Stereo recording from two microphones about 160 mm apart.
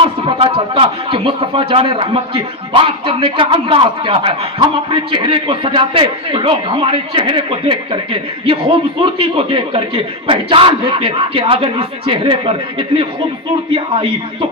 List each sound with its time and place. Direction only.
0.0 s speech: 35° right (ahead or behind)
13.7 s speech: 35° right (ahead or behind)